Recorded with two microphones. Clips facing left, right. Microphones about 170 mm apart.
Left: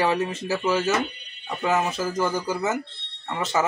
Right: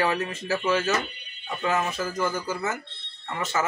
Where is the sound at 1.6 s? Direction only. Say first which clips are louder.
Left 3 dB; 25° left (ahead or behind).